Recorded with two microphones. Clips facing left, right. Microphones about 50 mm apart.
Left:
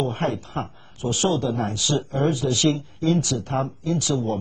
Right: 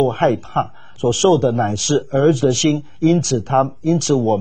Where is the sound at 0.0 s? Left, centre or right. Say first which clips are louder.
Right 9 dB; right.